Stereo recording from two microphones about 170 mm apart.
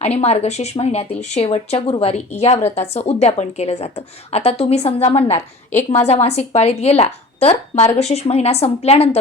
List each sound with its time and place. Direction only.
0.2 s a woman's voice: 40° left (ahead or behind)